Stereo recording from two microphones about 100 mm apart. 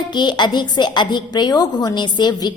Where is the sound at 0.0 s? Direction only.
50° left (ahead or behind).